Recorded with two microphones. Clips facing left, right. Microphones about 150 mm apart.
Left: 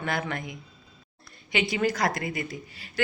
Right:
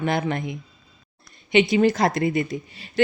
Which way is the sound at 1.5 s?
25° right (ahead or behind).